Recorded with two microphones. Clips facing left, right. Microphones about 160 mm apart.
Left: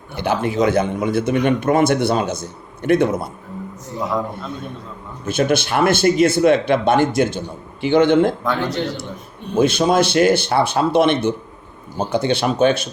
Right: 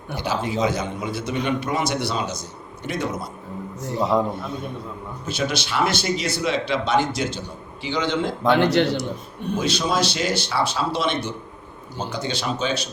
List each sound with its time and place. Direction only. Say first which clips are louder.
0.2 s a man's voice: left 5 dB; 60° left (ahead or behind)
5.2 s speech: left 8 dB; 55° left (ahead or behind)
8.4 s speech: right 4 dB; 75° right (ahead or behind)
9.6 s a man's voice: left 8 dB; 55° left (ahead or behind)